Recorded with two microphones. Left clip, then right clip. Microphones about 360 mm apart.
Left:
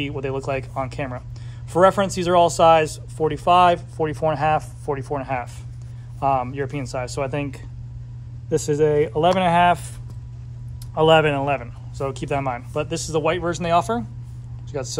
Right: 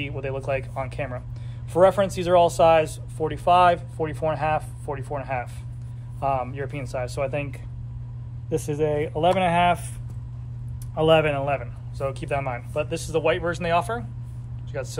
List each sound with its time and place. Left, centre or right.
0.0 s speech: left
11.0 s speech: left